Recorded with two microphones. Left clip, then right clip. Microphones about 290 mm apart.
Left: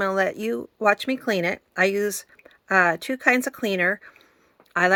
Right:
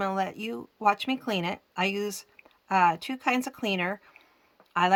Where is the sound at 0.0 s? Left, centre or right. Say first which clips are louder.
Left 7 dB; centre.